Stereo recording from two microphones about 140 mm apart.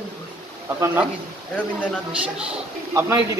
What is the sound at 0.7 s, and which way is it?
Speech, 15° right (ahead or behind).